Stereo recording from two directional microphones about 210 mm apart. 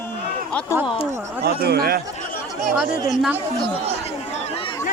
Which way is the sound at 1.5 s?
45° right (ahead or behind).